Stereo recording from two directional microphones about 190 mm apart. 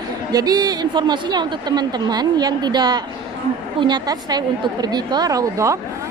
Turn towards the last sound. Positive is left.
turn(degrees=-15)  # may be behind; listen again after turning